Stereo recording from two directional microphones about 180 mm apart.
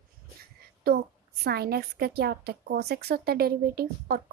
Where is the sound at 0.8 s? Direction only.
60° right (ahead or behind).